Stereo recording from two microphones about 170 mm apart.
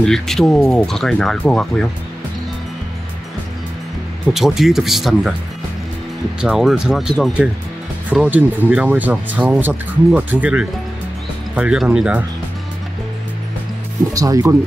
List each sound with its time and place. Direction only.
0.0 s speech: centre (ahead or behind)
4.3 s speech: centre (ahead or behind)
6.4 s speech: 5° right (ahead or behind)
14.1 s speech: 20° right (ahead or behind)